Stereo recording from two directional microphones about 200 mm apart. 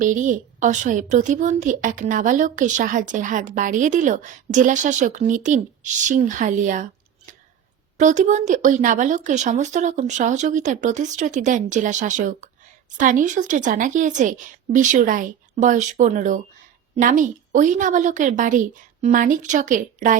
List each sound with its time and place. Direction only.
0.0 s a woman's voice: 40° right (ahead or behind)
7.9 s a woman's voice: 35° right (ahead or behind)